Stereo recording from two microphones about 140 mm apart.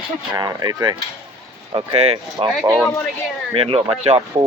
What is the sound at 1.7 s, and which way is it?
Speech, 40° right (ahead or behind).